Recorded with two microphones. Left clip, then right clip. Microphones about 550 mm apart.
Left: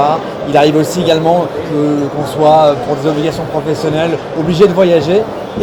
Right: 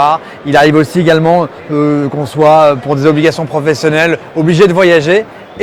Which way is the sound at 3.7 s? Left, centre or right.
Right.